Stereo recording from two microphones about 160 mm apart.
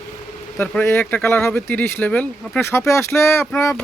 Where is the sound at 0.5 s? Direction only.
10° left (ahead or behind).